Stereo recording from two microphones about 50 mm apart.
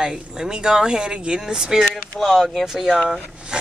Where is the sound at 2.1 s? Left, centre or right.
Centre.